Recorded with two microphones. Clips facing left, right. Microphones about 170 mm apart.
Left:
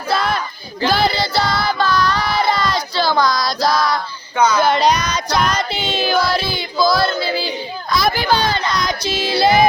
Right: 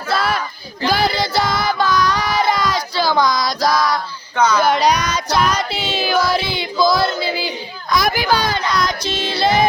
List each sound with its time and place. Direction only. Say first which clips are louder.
0.9 s child singing: even; 15° right (ahead or behind)
4.4 s speech: left 1 dB; 10° left (ahead or behind)
4.6 s female singing: even; 10° right (ahead or behind)
6.2 s a sound: right 1 dB; 20° right (ahead or behind)
7.2 s battle cry: left 1 dB; 15° right (ahead or behind)
8.1 s speech: left 1 dB; 10° right (ahead or behind)
8.9 s child singing: left 2 dB; 5° left (ahead or behind)